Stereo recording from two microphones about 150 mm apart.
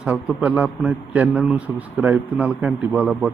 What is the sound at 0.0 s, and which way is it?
A man's voice, 10° right (ahead or behind).